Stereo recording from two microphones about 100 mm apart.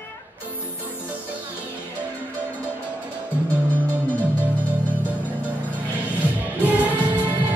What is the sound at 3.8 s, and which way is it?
Music, 15° right (ahead or behind).